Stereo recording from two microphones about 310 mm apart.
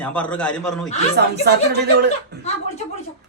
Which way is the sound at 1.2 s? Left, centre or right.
Right.